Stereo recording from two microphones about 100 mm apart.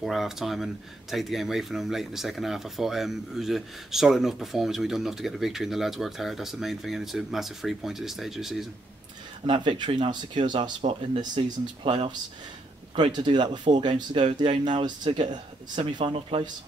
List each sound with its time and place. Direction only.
0.0 s speech: centre (ahead or behind)
9.5 s speech: 50° right (ahead or behind)
11.8 s speech: 65° right (ahead or behind)
12.9 s speech: 50° right (ahead or behind)